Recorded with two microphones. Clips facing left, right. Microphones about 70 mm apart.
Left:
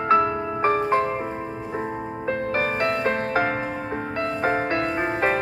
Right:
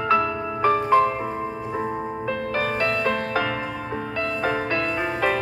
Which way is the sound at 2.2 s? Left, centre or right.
Left.